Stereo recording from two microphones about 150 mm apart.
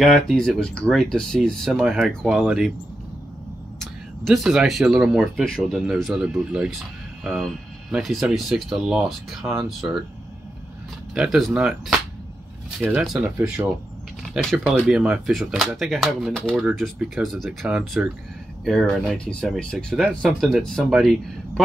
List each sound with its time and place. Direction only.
0.0 s speech: centre (ahead or behind)
3.8 s speech: centre (ahead or behind)
9.8 s speech: 15° right (ahead or behind)
11.1 s speech: centre (ahead or behind)
13.0 s speech: 5° right (ahead or behind)